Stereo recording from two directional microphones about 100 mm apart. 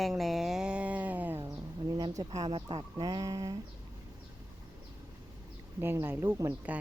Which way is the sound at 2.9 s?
40° right (ahead or behind).